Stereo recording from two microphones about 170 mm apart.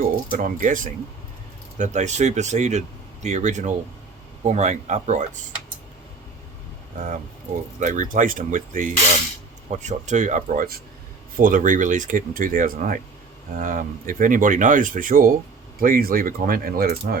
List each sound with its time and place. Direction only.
0.0 s speech: 55° right (ahead or behind)
7.8 s speech: 50° right (ahead or behind)